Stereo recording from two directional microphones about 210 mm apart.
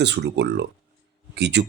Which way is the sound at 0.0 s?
55° right (ahead or behind).